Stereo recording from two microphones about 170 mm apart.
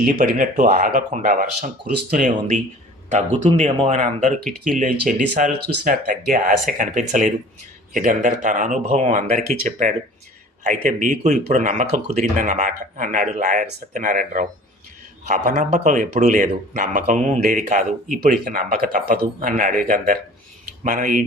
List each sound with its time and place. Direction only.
0.0 s speech: 55° right (ahead or behind)
15.4 s speech: 45° right (ahead or behind)